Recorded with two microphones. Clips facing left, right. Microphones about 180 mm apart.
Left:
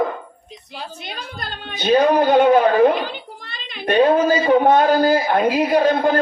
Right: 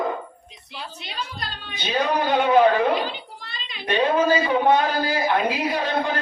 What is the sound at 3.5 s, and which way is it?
A man's voice, 50° left (ahead or behind).